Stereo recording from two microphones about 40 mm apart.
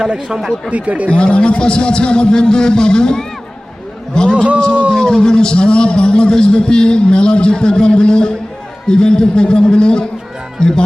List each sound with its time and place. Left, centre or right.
0.3 s speech: centre
0.7 s speech: right
1.1 s a man's voice: left